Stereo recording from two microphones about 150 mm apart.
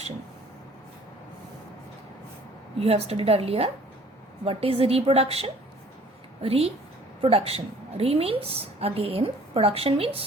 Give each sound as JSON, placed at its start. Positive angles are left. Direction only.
{"t": 2.8, "sound": "a woman's voice", "side_deg": -40}